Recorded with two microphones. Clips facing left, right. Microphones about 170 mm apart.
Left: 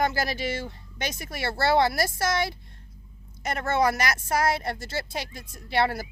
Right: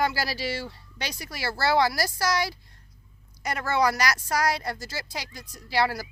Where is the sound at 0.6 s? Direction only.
20° left (ahead or behind).